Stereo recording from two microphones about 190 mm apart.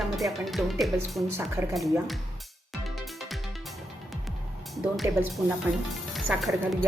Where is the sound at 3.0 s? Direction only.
Centre (ahead or behind).